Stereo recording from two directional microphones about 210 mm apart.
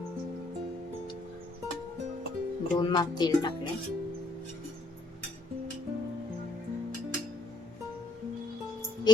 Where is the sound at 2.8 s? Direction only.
20° left (ahead or behind).